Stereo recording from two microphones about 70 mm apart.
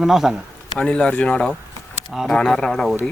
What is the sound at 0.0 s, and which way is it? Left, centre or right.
Speech, centre.